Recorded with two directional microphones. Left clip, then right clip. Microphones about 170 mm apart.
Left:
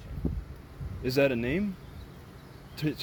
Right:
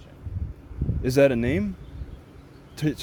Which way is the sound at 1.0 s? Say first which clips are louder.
Right 6 dB; 65° right (ahead or behind).